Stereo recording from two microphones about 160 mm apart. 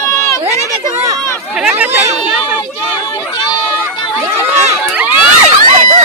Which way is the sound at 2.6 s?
25° left (ahead or behind).